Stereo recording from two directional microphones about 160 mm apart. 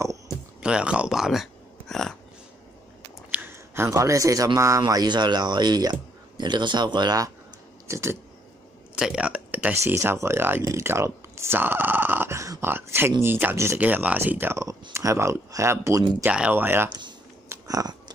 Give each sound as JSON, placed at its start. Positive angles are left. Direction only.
{"t": 0.6, "sound": "speech", "side_deg": -5}
{"t": 3.3, "sound": "speech", "side_deg": -10}
{"t": 8.9, "sound": "speech", "side_deg": -5}
{"t": 17.5, "sound": "chewing", "side_deg": -20}